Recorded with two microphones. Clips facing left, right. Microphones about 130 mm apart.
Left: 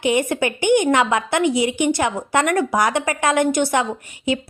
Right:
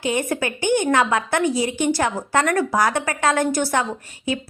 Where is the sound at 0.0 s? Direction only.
20° left (ahead or behind).